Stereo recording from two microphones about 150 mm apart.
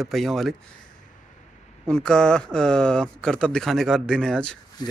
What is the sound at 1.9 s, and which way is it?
A man's voice, 5° left (ahead or behind).